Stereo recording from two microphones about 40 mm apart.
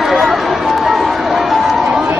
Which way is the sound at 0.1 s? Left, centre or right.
Centre.